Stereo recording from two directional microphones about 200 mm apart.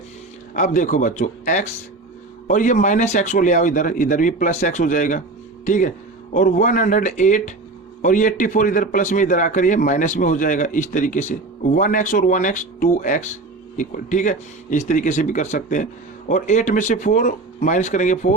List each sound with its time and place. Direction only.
0.5 s a man's voice: 40° left (ahead or behind)